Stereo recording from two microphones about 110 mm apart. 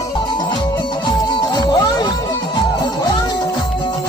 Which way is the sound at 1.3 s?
40° left (ahead or behind).